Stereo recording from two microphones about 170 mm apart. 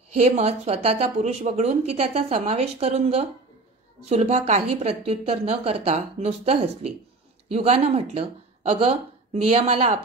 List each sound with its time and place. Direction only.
0.2 s a woman's voice: 40° right (ahead or behind)